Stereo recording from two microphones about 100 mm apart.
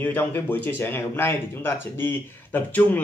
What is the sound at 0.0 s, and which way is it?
Speech, 20° left (ahead or behind).